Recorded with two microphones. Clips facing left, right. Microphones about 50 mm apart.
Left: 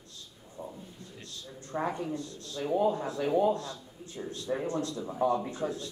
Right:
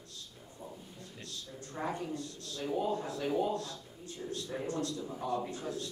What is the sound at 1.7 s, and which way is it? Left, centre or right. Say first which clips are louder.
A woman's voice: left 5 dB; centre.